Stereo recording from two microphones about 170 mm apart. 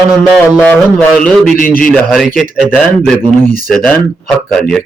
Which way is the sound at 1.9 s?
Centre (ahead or behind).